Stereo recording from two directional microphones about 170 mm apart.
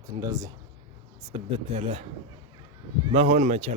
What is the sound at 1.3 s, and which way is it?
Speech, 35° right (ahead or behind).